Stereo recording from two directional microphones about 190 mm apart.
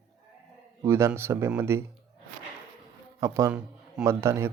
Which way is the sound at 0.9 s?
15° right (ahead or behind).